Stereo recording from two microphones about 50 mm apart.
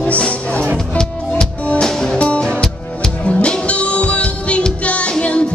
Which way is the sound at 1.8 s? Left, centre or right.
Centre.